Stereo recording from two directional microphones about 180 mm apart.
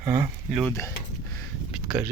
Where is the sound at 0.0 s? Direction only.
10° right (ahead or behind).